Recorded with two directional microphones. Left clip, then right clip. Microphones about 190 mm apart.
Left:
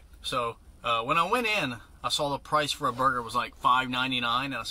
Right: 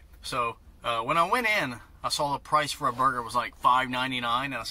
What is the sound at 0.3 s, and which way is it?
Speech, 15° left (ahead or behind).